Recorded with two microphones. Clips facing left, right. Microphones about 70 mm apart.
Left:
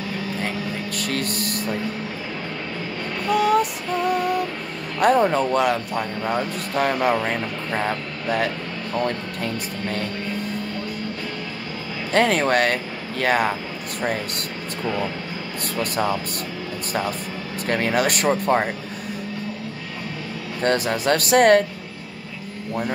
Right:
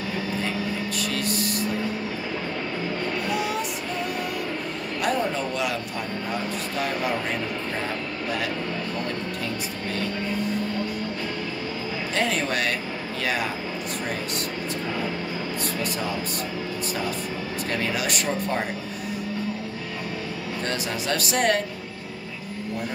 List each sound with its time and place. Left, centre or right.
0.9 s a sound: left
3.3 s music: left
5.0 s speech: left
12.1 s speech: left
15.8 s speech: left
17.6 s speech: left
20.6 s speech: left